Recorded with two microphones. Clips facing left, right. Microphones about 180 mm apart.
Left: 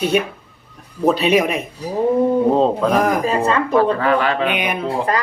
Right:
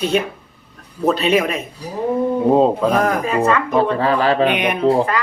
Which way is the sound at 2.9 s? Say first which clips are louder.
Left 1 dB; 10° left (ahead or behind).